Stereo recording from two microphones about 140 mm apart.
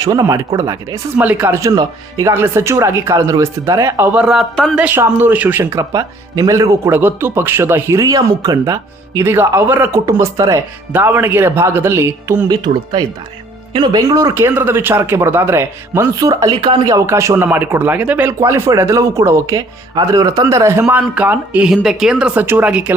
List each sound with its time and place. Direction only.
0.0 s speech: 25° right (ahead or behind)
1.1 s speech: 15° right (ahead or behind)
4.8 s speech: 10° right (ahead or behind)
12.6 s speech: 30° right (ahead or behind)
20.8 s speech: 10° right (ahead or behind)